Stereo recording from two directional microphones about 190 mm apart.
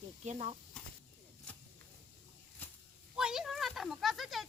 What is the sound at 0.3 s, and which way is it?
Speech, 35° right (ahead or behind).